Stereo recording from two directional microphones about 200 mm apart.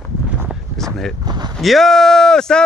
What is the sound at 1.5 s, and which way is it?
Speech, centre (ahead or behind).